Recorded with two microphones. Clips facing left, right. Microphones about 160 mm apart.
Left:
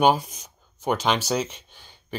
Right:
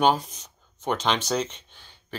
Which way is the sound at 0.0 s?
10° left (ahead or behind).